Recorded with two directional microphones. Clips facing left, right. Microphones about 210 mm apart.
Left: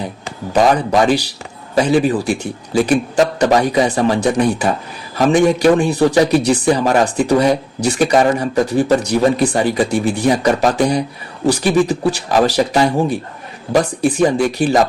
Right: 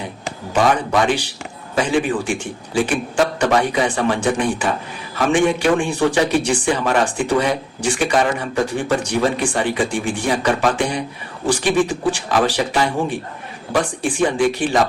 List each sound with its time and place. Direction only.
0.5 s speech: 40° left (ahead or behind)